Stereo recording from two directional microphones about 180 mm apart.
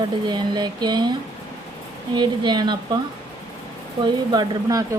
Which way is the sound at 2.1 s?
25° right (ahead or behind).